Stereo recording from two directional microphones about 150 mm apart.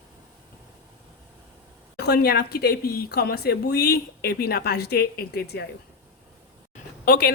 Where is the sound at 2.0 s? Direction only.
90° left.